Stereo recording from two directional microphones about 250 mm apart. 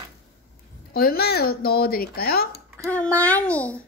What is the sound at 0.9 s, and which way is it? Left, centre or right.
A woman's voice, left.